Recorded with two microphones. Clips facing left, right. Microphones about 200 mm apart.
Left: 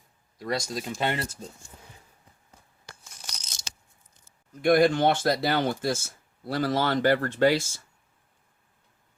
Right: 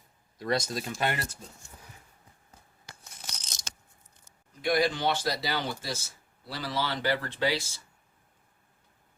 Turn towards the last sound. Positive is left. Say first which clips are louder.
# left 7 dB
turn(degrees=50)  # may be behind; listen again after turning